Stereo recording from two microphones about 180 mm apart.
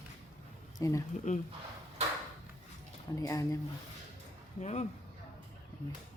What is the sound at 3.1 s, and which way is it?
Speech, 15° left (ahead or behind).